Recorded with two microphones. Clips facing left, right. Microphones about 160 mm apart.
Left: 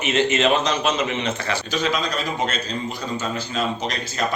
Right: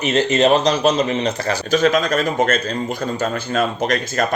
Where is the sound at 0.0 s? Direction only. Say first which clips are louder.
Right 4 dB; 35° right (ahead or behind).